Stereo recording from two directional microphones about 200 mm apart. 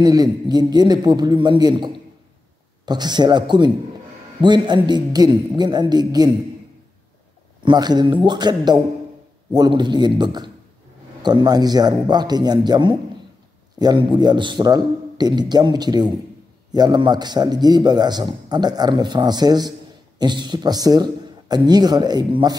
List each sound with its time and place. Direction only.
0.0 s a man's voice: 20° right (ahead or behind)
7.6 s a man's voice: 20° right (ahead or behind)